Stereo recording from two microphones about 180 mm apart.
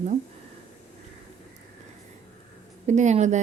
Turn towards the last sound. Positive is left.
turn(degrees=-40)  # may be behind; listen again after turning